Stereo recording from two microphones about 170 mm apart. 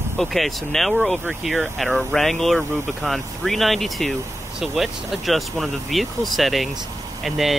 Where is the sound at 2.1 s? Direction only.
10° left (ahead or behind).